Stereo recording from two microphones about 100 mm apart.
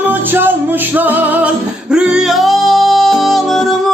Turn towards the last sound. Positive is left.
turn(degrees=0)  # may be behind; listen again after turning